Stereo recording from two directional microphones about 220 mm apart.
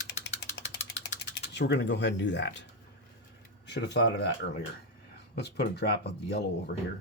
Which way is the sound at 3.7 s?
50° left (ahead or behind).